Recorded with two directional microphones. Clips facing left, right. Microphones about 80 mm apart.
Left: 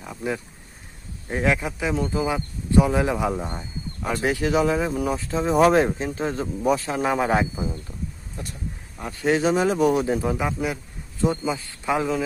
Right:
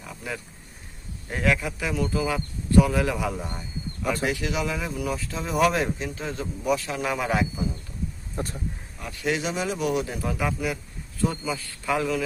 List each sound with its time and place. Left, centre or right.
0.0 s a sound: left
1.3 s speech: left
8.4 s speech: right
9.0 s speech: left